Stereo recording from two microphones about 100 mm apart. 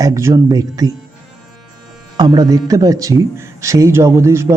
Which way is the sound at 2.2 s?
40° right (ahead or behind).